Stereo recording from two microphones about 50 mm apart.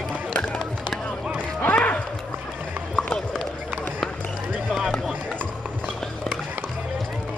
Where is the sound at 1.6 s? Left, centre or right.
Left.